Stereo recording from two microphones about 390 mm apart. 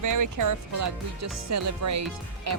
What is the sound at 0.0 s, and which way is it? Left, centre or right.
Speech, right.